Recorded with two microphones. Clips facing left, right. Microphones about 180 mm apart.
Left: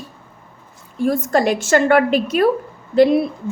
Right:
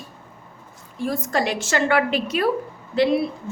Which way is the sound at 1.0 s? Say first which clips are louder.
Left 6 dB; 50° left (ahead or behind).